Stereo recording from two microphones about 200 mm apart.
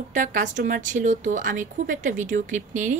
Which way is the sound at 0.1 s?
40° right (ahead or behind).